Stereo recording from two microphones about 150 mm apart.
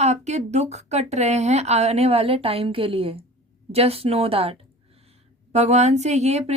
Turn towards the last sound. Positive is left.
turn(degrees=-45)  # may be behind; listen again after turning